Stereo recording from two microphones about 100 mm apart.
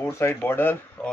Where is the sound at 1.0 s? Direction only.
10° left (ahead or behind).